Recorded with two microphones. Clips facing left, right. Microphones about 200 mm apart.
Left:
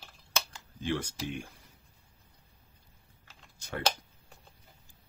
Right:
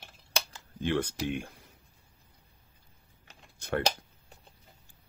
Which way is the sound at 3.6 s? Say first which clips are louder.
Right 7 dB; 55° right (ahead or behind).